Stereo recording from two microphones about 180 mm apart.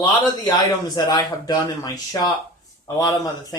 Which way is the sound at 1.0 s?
20° left (ahead or behind).